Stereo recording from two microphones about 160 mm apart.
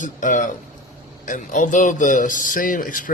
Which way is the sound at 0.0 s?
50° left (ahead or behind).